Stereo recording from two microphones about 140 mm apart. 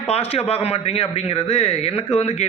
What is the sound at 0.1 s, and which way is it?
A man's voice, 45° left (ahead or behind).